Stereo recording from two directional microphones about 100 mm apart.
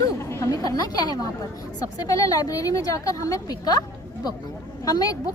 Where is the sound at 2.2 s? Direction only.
35° left (ahead or behind).